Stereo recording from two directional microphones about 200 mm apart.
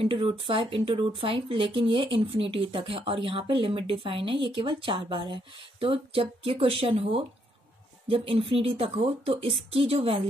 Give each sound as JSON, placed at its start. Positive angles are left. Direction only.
{"t": 0.0, "sound": "speech", "side_deg": -25}